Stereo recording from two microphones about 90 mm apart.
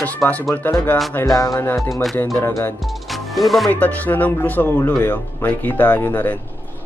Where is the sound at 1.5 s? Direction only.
30° left (ahead or behind).